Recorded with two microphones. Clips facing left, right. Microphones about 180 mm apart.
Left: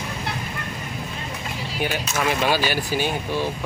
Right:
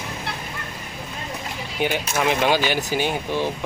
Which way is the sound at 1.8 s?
20° right (ahead or behind).